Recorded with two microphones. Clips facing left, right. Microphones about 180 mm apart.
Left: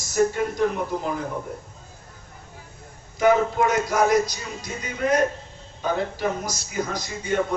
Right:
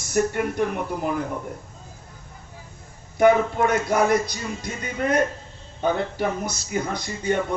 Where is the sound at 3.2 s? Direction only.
60° right (ahead or behind).